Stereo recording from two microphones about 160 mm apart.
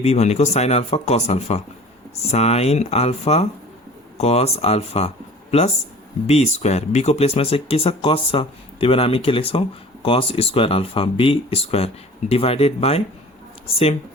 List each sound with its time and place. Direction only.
0.0 s speech: 40° left (ahead or behind)